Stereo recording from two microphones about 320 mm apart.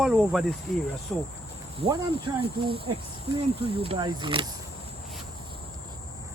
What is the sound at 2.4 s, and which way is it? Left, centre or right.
Speech, centre.